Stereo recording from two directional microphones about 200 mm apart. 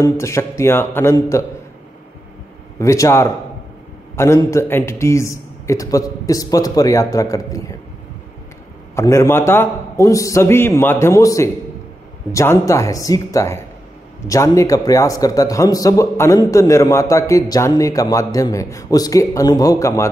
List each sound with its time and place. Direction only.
0.0 s a man's voice: 15° left (ahead or behind)
2.8 s a man's voice: 15° left (ahead or behind)
8.9 s a man's voice: 15° left (ahead or behind)